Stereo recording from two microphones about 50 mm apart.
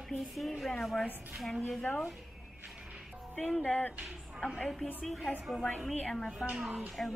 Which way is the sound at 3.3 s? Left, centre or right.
Left.